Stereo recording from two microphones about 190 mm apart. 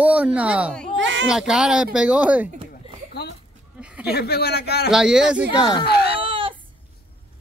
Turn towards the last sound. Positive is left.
turn(degrees=-30)  # may be behind; listen again after turning